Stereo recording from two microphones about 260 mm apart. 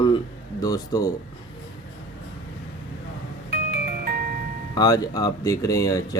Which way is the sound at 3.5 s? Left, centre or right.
Right.